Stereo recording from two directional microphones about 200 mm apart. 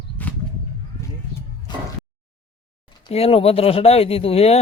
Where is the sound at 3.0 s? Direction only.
30° left (ahead or behind).